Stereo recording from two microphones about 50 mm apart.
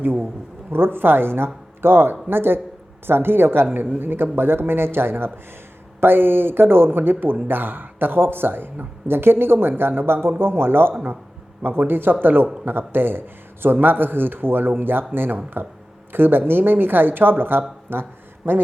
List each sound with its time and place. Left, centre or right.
0.0 s a man's voice: right